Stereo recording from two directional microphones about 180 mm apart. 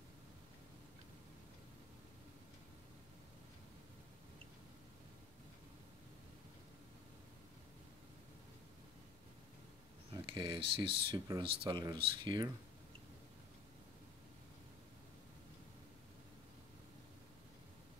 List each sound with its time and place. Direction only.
10.1 s speech: 25° right (ahead or behind)